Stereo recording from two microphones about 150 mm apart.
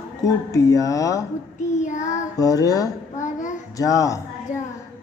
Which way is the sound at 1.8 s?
55° left (ahead or behind).